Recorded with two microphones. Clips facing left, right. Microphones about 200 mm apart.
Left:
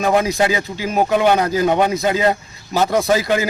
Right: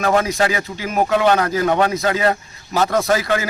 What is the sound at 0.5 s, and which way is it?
Speech, 25° left (ahead or behind).